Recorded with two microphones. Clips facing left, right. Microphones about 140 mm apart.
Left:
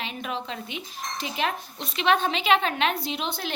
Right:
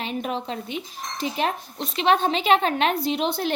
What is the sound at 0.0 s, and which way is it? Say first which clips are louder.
A woman's voice: right 4 dB; 45° right (ahead or behind).